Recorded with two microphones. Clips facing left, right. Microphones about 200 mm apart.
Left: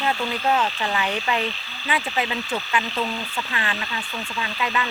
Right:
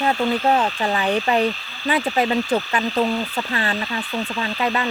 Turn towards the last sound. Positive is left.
turn(degrees=-40)  # may be behind; listen again after turning